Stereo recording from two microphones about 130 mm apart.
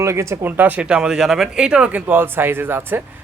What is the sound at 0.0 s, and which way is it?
Speech, 20° right (ahead or behind).